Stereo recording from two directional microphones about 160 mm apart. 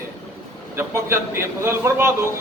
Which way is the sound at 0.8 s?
15° right (ahead or behind).